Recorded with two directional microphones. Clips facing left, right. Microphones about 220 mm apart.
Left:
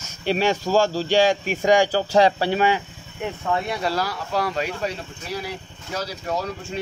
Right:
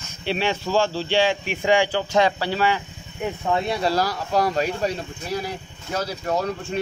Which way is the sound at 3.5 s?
20° right (ahead or behind).